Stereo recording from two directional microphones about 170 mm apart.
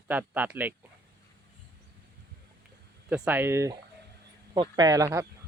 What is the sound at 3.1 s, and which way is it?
Speech, 10° right (ahead or behind).